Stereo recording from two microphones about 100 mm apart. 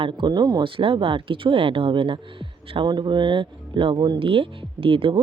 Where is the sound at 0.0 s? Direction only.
50° right (ahead or behind).